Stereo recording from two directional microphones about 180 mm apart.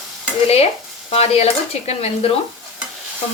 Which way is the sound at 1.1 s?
35° left (ahead or behind).